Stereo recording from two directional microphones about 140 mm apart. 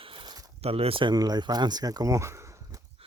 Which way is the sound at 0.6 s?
45° right (ahead or behind).